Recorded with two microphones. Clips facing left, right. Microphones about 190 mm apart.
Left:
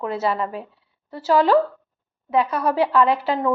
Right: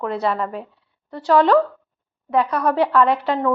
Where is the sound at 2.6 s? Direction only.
5° left (ahead or behind).